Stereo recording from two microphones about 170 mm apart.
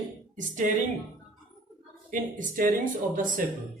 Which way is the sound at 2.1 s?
50° right (ahead or behind).